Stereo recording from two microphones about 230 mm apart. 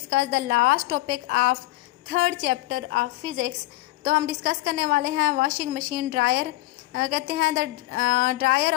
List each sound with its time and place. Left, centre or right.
0.1 s a woman's voice: right
4.0 s a woman's voice: right